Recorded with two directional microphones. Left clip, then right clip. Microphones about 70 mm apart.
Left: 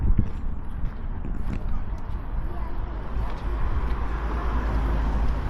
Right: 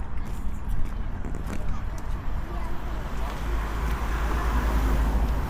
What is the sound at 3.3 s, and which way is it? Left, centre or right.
Vehicle, right.